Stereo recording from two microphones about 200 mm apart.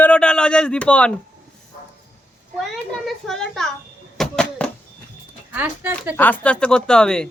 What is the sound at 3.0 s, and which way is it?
Speech, centre (ahead or behind).